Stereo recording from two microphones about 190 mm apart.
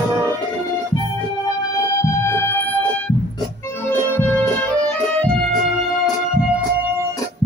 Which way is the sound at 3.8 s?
10° left (ahead or behind).